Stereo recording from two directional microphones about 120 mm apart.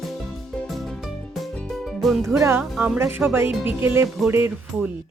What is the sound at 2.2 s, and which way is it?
Speech, 25° right (ahead or behind).